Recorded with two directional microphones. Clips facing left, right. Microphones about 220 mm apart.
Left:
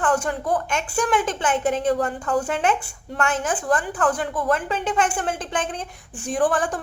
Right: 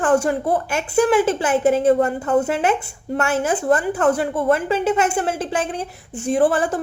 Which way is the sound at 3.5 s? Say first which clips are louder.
Right 5 dB; 25° right (ahead or behind).